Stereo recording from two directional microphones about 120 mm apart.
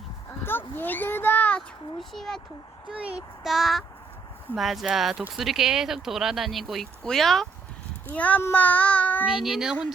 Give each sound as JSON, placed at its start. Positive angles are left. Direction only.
{"t": 0.4, "sound": "a sound", "side_deg": 15}
{"t": 2.0, "sound": "speech", "side_deg": 5}
{"t": 2.9, "sound": "speech", "side_deg": -10}
{"t": 8.1, "sound": "a child's voice", "side_deg": 10}
{"t": 9.2, "sound": "speech", "side_deg": -5}